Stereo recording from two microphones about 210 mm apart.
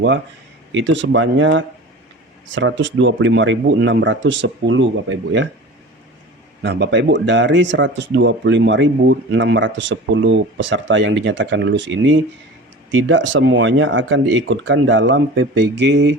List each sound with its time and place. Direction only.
0.7 s speech: 65° right (ahead or behind)
6.6 s speech: 55° right (ahead or behind)